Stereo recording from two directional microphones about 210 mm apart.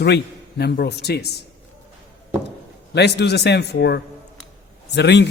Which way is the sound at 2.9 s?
55° left (ahead or behind).